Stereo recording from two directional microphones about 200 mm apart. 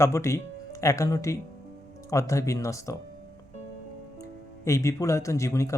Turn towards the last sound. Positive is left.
turn(degrees=15)  # may be behind; listen again after turning